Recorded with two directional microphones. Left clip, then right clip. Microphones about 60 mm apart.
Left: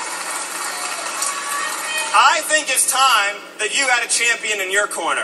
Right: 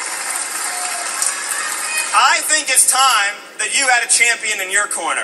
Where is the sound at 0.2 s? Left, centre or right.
Right.